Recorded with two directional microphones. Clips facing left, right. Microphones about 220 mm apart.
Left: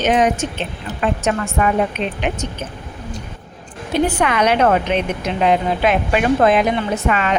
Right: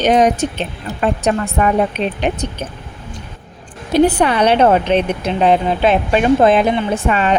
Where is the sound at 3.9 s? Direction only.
35° right (ahead or behind).